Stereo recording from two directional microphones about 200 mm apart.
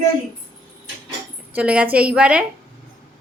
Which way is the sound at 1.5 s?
5° right (ahead or behind).